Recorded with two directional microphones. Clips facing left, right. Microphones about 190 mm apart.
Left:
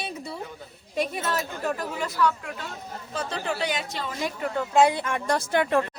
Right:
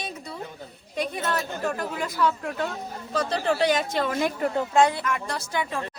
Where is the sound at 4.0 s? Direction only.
60° right (ahead or behind).